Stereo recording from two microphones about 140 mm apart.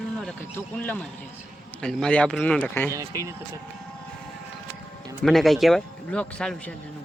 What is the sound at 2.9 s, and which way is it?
Speech, 25° right (ahead or behind).